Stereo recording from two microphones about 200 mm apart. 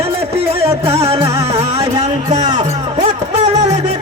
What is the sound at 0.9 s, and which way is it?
Music, 30° right (ahead or behind).